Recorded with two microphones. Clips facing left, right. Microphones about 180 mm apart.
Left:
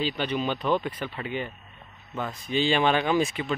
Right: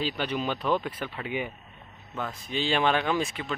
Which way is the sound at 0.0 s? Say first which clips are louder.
Left 2 dB; 5° right (ahead or behind).